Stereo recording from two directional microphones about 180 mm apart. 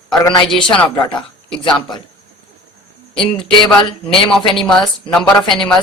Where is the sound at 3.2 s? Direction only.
Centre (ahead or behind).